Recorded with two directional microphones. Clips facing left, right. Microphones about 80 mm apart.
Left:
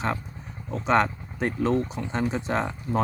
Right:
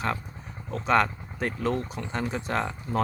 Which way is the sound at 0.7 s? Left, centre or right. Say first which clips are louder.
Left 1 dB; left.